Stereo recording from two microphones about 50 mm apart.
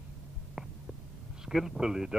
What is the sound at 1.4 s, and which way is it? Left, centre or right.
Speech, centre.